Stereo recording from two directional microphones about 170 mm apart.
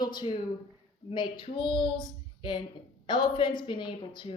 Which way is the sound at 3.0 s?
30° left (ahead or behind).